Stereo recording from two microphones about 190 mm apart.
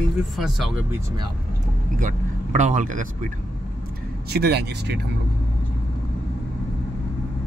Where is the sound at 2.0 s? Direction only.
40° right (ahead or behind).